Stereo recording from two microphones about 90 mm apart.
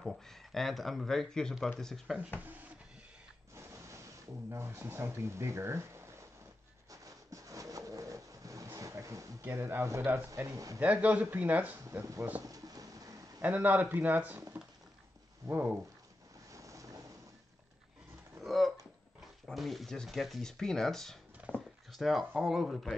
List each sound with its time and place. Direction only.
0.0 s speech: centre (ahead or behind)
3.5 s speech: 35° right (ahead or behind)
6.9 s pigeon: 40° right (ahead or behind)
8.7 s speech: 35° right (ahead or behind)
10.8 s speech: 15° right (ahead or behind)
12.4 s a sound: 45° right (ahead or behind)
13.4 s speech: 20° right (ahead or behind)
15.4 s speech: 25° right (ahead or behind)
16.5 s boat: 35° right (ahead or behind)
18.4 s a sound: centre (ahead or behind)
19.4 s speech: centre (ahead or behind)
21.5 s a sound: 20° left (ahead or behind)
21.9 s speech: centre (ahead or behind)